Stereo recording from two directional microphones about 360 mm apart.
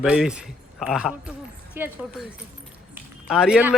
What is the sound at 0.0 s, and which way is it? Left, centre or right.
A man's voice, centre.